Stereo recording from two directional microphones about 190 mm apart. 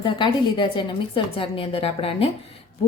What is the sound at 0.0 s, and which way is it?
A woman's voice, 25° left (ahead or behind).